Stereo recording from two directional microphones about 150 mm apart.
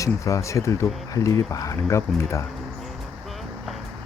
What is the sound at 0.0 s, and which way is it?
Speech, 20° left (ahead or behind).